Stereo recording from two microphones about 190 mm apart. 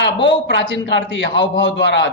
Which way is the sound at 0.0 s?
65° left (ahead or behind).